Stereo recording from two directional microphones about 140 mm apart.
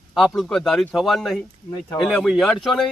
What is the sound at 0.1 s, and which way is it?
A man's voice, centre (ahead or behind).